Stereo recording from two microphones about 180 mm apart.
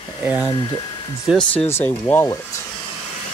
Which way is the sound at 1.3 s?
5° left (ahead or behind).